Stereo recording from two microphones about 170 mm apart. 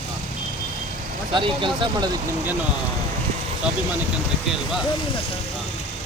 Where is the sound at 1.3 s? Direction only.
30° right (ahead or behind).